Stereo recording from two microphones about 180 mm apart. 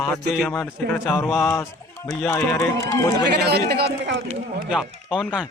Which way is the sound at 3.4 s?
65° right (ahead or behind).